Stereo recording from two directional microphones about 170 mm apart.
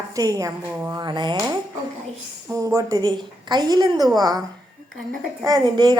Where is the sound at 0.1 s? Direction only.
20° right (ahead or behind).